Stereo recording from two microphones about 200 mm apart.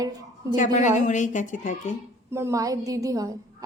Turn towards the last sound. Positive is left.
turn(degrees=-15)  # may be behind; listen again after turning